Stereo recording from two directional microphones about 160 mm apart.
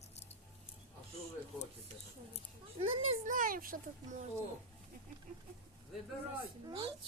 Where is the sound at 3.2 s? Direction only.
55° right (ahead or behind).